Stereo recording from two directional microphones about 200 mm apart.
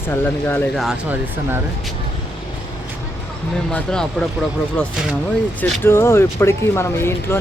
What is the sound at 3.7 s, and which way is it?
Speech, 5° left (ahead or behind).